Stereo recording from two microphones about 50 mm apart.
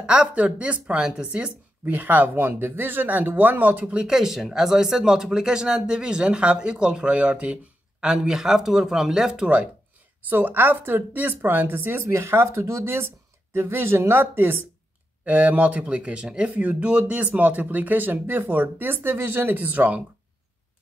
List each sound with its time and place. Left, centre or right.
0.0 s speech: right
2.3 s speech: right
3.8 s speech: right
4.1 s speech: centre
10.3 s a woman's voice: right
12.1 s speech: right
14.2 s a woman's voice: right